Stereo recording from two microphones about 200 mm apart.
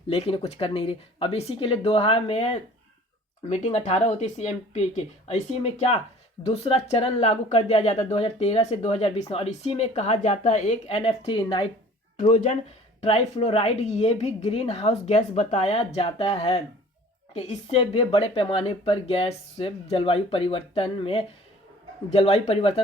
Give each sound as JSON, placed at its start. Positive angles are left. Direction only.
{"t": 0.1, "sound": "speech", "side_deg": 30}
{"t": 12.2, "sound": "speech", "side_deg": 35}